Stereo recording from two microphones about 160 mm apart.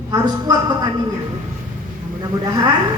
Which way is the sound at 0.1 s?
25° right (ahead or behind).